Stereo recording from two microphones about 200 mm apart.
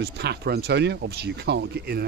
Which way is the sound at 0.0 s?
55° right (ahead or behind).